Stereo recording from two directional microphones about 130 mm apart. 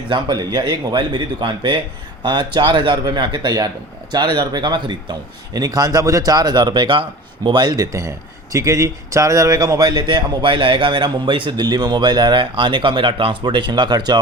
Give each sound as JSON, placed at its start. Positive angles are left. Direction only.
{"t": 0.1, "sound": "a man's voice", "side_deg": -35}